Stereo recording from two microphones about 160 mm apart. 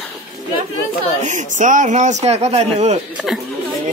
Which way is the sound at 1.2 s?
50° right (ahead or behind).